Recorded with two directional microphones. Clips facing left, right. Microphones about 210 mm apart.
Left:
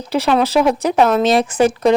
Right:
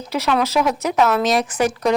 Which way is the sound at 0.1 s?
30° left (ahead or behind).